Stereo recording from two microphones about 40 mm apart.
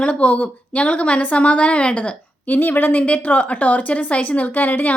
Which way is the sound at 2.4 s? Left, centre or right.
Left.